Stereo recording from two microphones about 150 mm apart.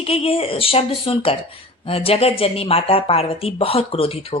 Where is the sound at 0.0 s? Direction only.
40° left (ahead or behind).